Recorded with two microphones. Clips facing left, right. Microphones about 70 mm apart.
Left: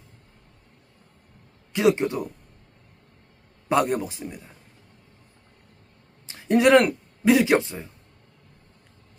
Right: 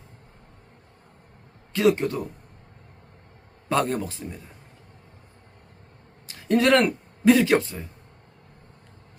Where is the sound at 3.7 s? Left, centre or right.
Centre.